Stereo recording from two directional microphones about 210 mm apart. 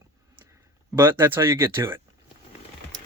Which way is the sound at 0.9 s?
10° right (ahead or behind).